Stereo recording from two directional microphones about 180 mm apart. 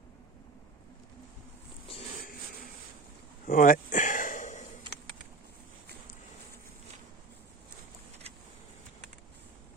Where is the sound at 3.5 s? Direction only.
50° left (ahead or behind).